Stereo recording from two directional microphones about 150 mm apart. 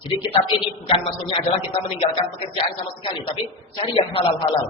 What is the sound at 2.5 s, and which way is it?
A man's voice, 35° left (ahead or behind).